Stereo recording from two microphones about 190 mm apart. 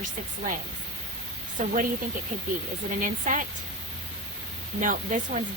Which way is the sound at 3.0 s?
45° right (ahead or behind).